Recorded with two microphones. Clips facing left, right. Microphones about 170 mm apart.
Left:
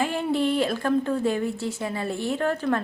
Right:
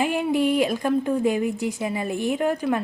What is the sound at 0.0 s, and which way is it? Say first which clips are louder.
A woman's voice: right 2 dB; 15° right (ahead or behind).